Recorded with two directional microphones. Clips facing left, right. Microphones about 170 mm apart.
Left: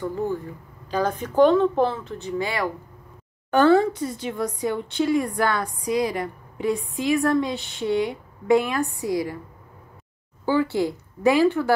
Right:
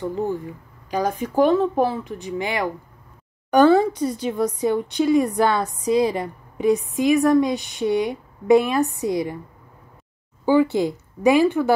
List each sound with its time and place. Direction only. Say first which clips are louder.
0.0 s a woman's voice: right 2 dB; 15° right (ahead or behind)
10.4 s a woman's voice: right 4 dB; 15° right (ahead or behind)